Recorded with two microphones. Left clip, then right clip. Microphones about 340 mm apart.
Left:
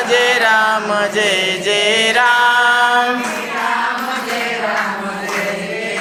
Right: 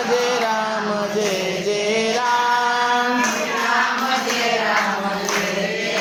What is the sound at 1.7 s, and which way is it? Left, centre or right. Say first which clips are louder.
Mantra: left 7 dB; left.